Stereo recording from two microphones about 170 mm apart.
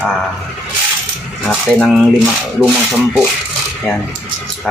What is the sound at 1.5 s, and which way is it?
Speech, centre (ahead or behind).